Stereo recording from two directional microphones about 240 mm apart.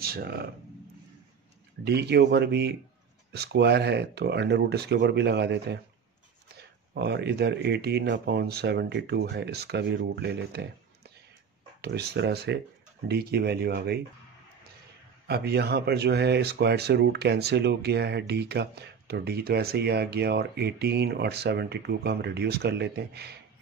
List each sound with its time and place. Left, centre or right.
0.0 s speech: right
1.9 s speech: right
11.8 s speech: right
15.2 s speech: right